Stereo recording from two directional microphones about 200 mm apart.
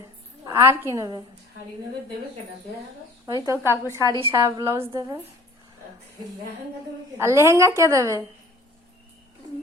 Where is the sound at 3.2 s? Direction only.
15° right (ahead or behind).